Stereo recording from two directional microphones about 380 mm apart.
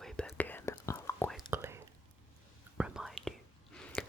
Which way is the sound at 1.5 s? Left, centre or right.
Centre.